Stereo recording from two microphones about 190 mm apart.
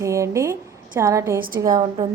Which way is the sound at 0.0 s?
15° right (ahead or behind).